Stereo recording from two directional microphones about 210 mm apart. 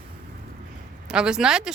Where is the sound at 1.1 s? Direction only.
5° right (ahead or behind).